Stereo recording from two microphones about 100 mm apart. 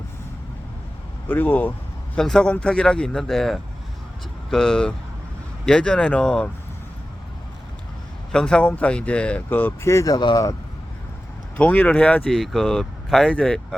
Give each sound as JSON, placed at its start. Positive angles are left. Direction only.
{"t": 1.3, "sound": "speech", "side_deg": 20}
{"t": 2.1, "sound": "speech", "side_deg": 5}
{"t": 8.3, "sound": "speech", "side_deg": 10}
{"t": 10.2, "sound": "speech", "side_deg": 50}
{"t": 11.5, "sound": "speech", "side_deg": 15}